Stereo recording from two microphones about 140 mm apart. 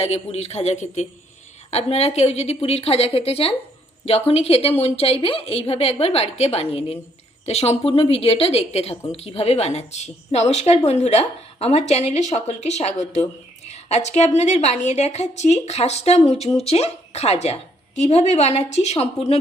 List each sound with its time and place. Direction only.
0.0 s a woman's voice: 45° left (ahead or behind)